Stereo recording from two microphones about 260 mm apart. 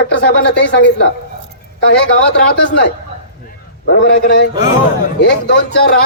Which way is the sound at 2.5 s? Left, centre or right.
Left.